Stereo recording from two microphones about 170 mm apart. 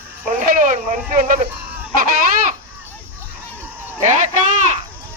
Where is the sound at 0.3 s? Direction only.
55° right (ahead or behind).